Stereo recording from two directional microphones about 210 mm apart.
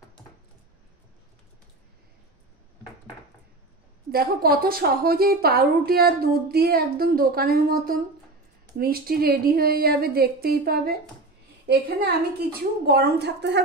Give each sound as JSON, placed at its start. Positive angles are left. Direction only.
{"t": 4.1, "sound": "a woman's voice", "side_deg": -45}